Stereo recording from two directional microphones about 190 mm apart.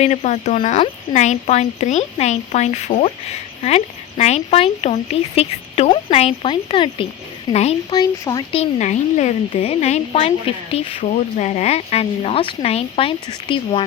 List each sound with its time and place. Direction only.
0.0 s speech: 35° left (ahead or behind)
7.9 s speech: 20° left (ahead or behind)
8.5 s speech: 40° left (ahead or behind)